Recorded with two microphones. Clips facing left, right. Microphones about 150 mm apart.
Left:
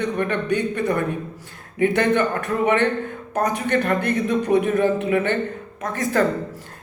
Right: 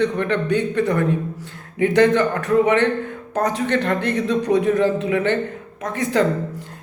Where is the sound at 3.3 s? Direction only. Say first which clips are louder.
Right 1 dB; 15° left (ahead or behind).